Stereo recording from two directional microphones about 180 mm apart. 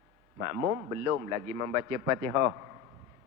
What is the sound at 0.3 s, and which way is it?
A man's voice, 20° right (ahead or behind).